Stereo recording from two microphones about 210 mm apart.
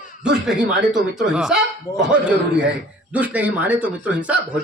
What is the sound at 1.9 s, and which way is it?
Speech, 15° left (ahead or behind).